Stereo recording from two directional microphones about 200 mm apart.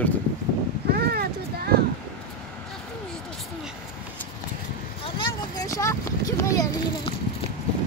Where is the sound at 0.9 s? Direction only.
50° right (ahead or behind).